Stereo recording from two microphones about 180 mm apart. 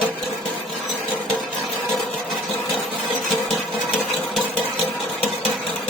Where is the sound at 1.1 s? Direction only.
Centre (ahead or behind).